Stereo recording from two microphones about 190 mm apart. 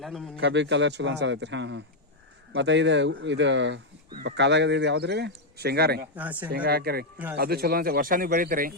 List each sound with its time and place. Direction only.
0.0 s a man's voice: centre (ahead or behind)
0.3 s a man's voice: 70° right (ahead or behind)
6.1 s speech: 10° right (ahead or behind)
6.5 s speech: 55° right (ahead or behind)